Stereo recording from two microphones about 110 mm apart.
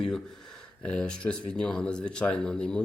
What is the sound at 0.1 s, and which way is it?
Speech, 5° left (ahead or behind).